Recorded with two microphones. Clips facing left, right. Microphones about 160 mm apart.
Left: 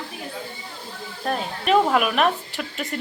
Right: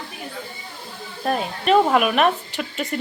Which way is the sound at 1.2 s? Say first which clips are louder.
Right 3 dB; 5° right (ahead or behind).